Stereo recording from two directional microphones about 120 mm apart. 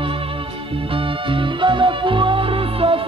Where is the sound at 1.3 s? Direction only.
45° right (ahead or behind).